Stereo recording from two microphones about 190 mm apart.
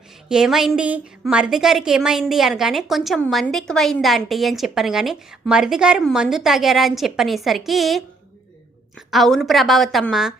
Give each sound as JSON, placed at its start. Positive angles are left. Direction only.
{"t": 0.3, "sound": "a woman's voice", "side_deg": -5}
{"t": 9.0, "sound": "a woman's voice", "side_deg": 0}